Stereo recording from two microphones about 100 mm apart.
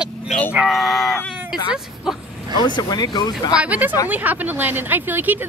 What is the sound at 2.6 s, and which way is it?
Speech, 40° left (ahead or behind).